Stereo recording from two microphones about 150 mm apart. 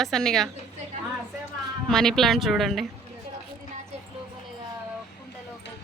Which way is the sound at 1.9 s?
5° left (ahead or behind).